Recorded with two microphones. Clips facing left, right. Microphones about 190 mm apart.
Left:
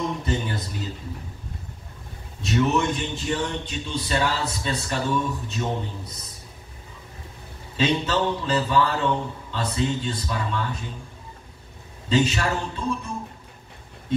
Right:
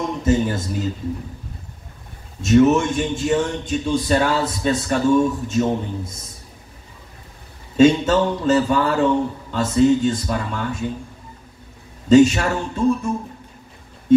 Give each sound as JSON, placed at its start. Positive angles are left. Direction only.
{"t": 0.2, "sound": "a sound", "side_deg": -45}
{"t": 2.4, "sound": "a man's voice", "side_deg": -45}
{"t": 7.7, "sound": "a man's voice", "side_deg": -45}
{"t": 12.1, "sound": "a man's voice", "side_deg": -45}